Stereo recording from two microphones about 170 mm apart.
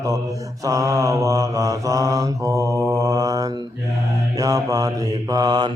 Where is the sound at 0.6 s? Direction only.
20° right (ahead or behind).